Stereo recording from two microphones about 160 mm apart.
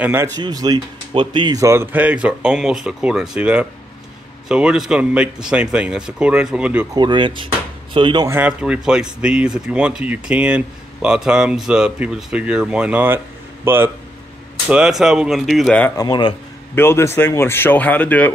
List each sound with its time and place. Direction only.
0.0 s speech: 15° right (ahead or behind)
6.9 s speech: 30° right (ahead or behind)
8.3 s speech: 10° right (ahead or behind)
16.0 s speech: 25° left (ahead or behind)
16.7 s speech: 15° left (ahead or behind)